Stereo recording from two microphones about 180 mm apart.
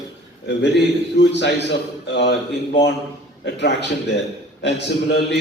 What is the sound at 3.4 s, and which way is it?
Speech, 70° left (ahead or behind).